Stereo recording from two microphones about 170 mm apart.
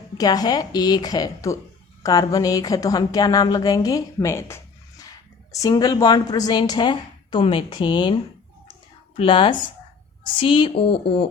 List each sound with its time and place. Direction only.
0.2 s a woman's voice: 20° left (ahead or behind)
9.1 s a woman's voice: 30° left (ahead or behind)